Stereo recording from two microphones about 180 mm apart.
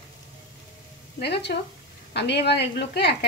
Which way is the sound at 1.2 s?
65° left (ahead or behind).